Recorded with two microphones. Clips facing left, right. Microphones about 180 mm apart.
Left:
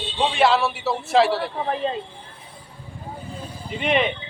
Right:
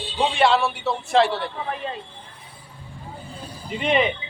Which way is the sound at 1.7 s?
30° left (ahead or behind).